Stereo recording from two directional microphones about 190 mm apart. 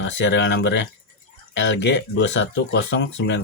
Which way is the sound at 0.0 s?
70° left (ahead or behind).